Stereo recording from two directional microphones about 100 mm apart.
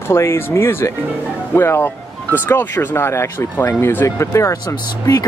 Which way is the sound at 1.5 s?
20° left (ahead or behind).